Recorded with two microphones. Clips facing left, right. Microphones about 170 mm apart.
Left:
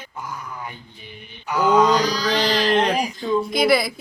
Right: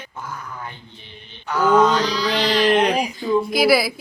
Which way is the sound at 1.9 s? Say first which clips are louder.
Left 1 dB; 40° left (ahead or behind).